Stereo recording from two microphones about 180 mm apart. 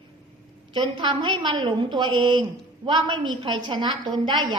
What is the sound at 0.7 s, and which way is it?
A woman's voice, 25° right (ahead or behind).